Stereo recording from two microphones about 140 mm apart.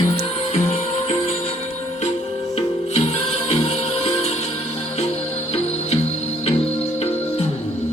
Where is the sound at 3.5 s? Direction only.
45° left (ahead or behind).